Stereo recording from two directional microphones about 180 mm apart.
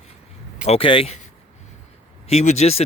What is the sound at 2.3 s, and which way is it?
Speech, 35° left (ahead or behind).